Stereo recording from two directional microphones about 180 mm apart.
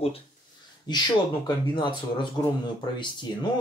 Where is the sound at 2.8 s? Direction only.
25° left (ahead or behind).